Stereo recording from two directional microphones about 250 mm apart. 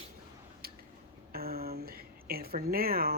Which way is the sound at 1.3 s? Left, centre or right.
Right.